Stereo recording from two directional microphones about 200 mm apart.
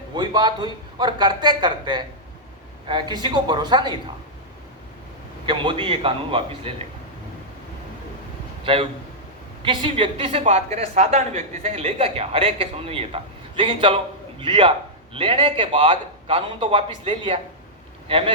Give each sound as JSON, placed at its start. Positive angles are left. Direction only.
{"t": 0.1, "sound": "a woman's voice", "side_deg": -20}
{"t": 5.5, "sound": "a woman's voice", "side_deg": -25}
{"t": 8.6, "sound": "a woman's voice", "side_deg": -30}